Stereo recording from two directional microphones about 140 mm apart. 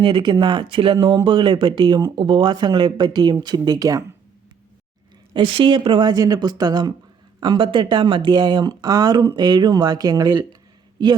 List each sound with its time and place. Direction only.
0.0 s speech: 35° right (ahead or behind)
5.3 s speech: 40° right (ahead or behind)